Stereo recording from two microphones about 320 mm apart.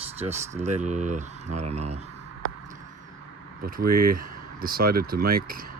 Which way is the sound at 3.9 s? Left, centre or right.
Right.